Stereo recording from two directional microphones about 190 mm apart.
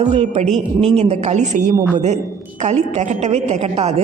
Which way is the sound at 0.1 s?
35° right (ahead or behind).